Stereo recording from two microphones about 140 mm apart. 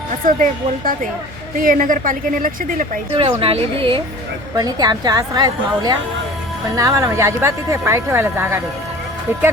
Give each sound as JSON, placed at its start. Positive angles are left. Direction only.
{"t": 0.3, "sound": "speech", "side_deg": -70}
{"t": 3.2, "sound": "a woman's voice", "side_deg": -40}
{"t": 4.5, "sound": "speech", "side_deg": -30}